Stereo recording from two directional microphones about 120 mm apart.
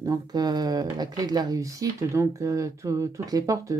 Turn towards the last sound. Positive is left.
turn(degrees=-30)  # may be behind; listen again after turning